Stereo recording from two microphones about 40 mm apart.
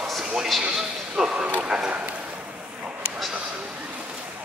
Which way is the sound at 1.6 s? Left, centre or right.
Right.